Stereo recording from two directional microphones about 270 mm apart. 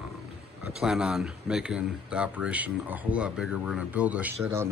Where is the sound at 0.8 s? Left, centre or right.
Centre.